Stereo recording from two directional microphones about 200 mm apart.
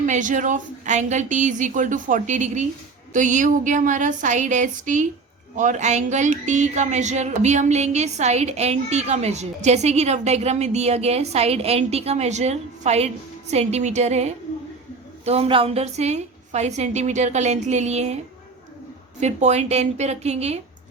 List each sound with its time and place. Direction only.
0.0 s speech: 40° right (ahead or behind)
19.2 s speech: 35° right (ahead or behind)